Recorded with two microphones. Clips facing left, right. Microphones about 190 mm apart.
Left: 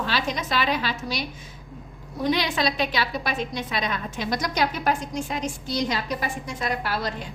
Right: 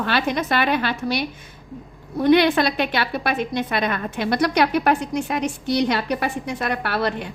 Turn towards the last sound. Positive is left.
turn(degrees=-65)  # may be behind; listen again after turning